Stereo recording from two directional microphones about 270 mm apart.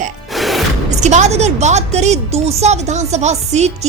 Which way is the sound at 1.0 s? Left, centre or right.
Right.